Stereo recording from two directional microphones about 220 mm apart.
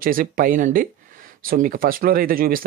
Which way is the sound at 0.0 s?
40° right (ahead or behind).